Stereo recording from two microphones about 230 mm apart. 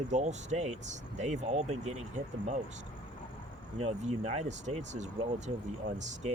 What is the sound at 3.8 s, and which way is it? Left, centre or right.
Speech, right.